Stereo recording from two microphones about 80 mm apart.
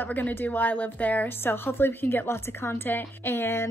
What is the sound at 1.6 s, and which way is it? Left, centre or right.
A woman's voice, left.